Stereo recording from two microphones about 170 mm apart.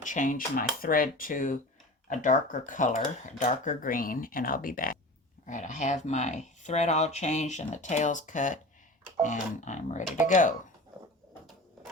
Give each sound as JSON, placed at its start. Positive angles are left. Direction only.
{"t": 0.0, "sound": "speech", "side_deg": 50}